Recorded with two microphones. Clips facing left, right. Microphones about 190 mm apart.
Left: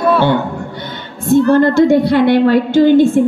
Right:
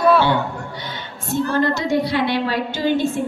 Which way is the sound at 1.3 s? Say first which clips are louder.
Left 10 dB; 55° left (ahead or behind).